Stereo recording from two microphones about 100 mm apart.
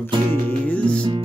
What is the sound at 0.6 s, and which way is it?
Music, 10° left (ahead or behind).